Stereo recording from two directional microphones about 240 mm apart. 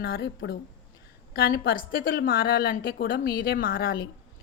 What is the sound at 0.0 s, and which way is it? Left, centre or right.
Speech, left.